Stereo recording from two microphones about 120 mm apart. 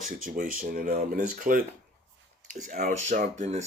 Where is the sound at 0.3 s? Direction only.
70° right (ahead or behind).